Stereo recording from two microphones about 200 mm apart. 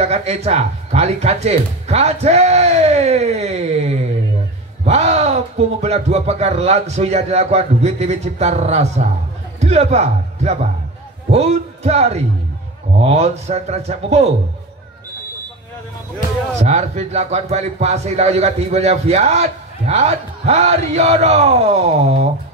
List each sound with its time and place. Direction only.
0.0 s a man's voice: 35° right (ahead or behind)
16.5 s a man's voice: 35° right (ahead or behind)